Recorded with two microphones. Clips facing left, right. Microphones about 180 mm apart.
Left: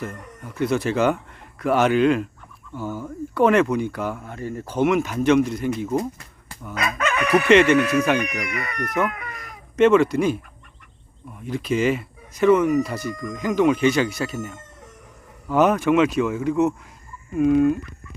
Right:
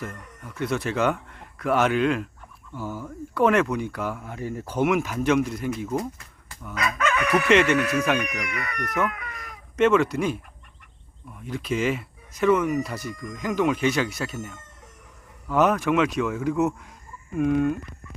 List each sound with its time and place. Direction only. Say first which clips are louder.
0.0 s a man's voice: left 4 dB; centre (ahead or behind)
6.7 s chicken: left 1 dB; 25° left (ahead or behind)
7.4 s a man's voice: left 5 dB; centre (ahead or behind)
7.8 s chicken: left 4 dB; 25° left (ahead or behind)
9.7 s a man's voice: left 4 dB; centre (ahead or behind)
11.4 s a man's voice: left 4 dB; centre (ahead or behind)